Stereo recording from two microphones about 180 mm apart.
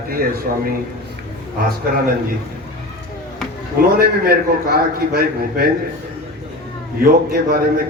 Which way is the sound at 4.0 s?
55° right (ahead or behind).